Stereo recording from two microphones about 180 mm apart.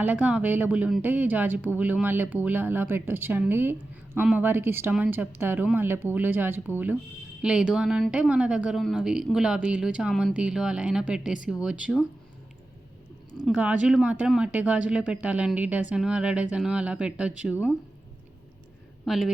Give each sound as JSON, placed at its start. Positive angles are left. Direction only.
{"t": 0.0, "sound": "speech", "side_deg": -10}
{"t": 13.4, "sound": "speech", "side_deg": -5}
{"t": 19.0, "sound": "a woman's voice", "side_deg": 0}